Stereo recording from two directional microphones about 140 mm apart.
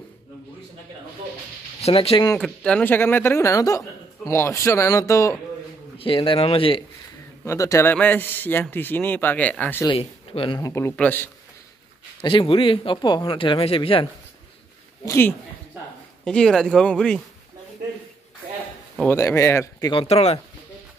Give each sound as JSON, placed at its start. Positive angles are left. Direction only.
{"t": 1.8, "sound": "speech", "side_deg": 45}
{"t": 2.4, "sound": "speech", "side_deg": 5}
{"t": 5.9, "sound": "speech", "side_deg": 40}
{"t": 7.4, "sound": "a man's voice", "side_deg": 20}
{"t": 9.8, "sound": "speech", "side_deg": 40}
{"t": 10.6, "sound": "a man's voice", "side_deg": 20}
{"t": 12.2, "sound": "speech", "side_deg": 35}
{"t": 15.0, "sound": "a man's voice", "side_deg": 15}
{"t": 16.3, "sound": "speech", "side_deg": 5}
{"t": 19.0, "sound": "speech", "side_deg": 20}
{"t": 19.9, "sound": "speech", "side_deg": 45}